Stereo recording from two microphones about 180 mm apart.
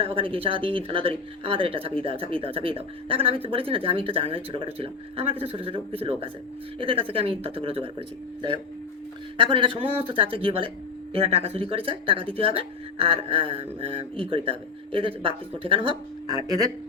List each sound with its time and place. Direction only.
0.0 s speech: 30° right (ahead or behind)